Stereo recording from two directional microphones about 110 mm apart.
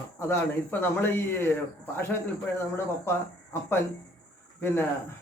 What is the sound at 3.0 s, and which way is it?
Speech, 20° left (ahead or behind).